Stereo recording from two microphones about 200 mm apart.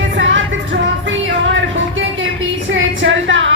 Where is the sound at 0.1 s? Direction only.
70° right (ahead or behind).